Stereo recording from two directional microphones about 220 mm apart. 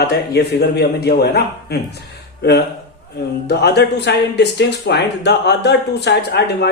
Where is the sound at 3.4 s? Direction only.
50° left (ahead or behind).